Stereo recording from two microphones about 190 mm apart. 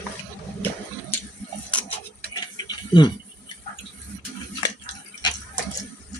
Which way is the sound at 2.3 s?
25° left (ahead or behind).